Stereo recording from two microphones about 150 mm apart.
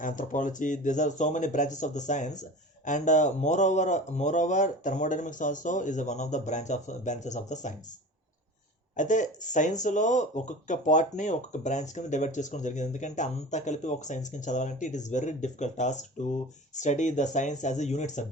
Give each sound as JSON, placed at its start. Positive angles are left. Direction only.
{"t": 0.0, "sound": "speech", "side_deg": 60}
{"t": 9.0, "sound": "speech", "side_deg": 55}